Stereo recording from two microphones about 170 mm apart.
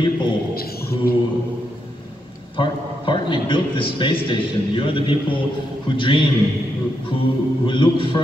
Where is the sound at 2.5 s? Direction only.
30° left (ahead or behind).